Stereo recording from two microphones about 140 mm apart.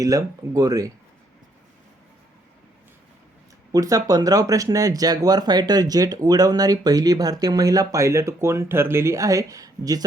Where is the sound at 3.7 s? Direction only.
25° right (ahead or behind).